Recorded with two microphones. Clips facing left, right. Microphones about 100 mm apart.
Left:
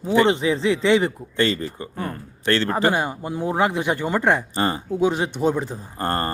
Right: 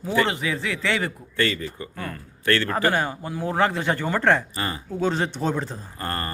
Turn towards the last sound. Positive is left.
turn(degrees=30)  # may be behind; listen again after turning